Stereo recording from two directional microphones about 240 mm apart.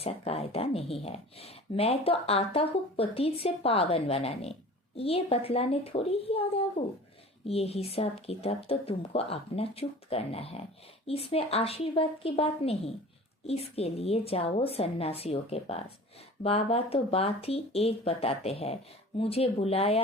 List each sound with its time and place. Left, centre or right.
0.0 s speech: left